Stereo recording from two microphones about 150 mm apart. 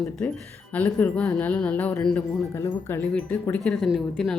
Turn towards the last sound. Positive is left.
turn(degrees=0)  # may be behind; listen again after turning